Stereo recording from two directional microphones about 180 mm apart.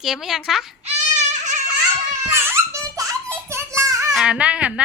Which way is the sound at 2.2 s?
15° right (ahead or behind).